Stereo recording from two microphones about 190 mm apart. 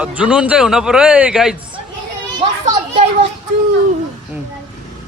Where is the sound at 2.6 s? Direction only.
35° right (ahead or behind).